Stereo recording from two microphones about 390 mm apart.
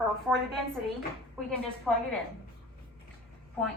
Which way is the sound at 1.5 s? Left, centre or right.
Centre.